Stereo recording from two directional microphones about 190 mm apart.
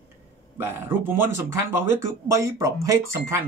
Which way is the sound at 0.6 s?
10° right (ahead or behind).